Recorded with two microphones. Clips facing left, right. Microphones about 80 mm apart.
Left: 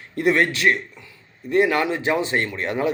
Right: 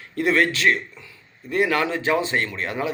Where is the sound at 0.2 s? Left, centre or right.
Left.